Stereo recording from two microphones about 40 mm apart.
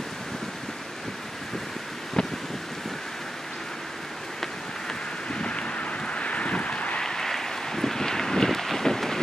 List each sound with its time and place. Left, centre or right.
2.2 s wind: centre
5.3 s a sound: left
7.0 s vehicle: centre